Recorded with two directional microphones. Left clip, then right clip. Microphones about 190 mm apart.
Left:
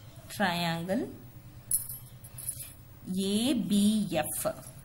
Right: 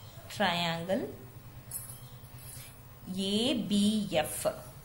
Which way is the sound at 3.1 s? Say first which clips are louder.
Even; 30° left (ahead or behind).